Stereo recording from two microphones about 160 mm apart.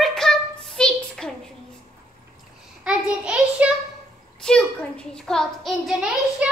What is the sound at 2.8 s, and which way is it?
Child singing, 5° right (ahead or behind).